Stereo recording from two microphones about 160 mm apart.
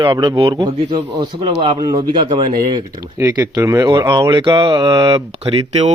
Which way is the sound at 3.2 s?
15° right (ahead or behind).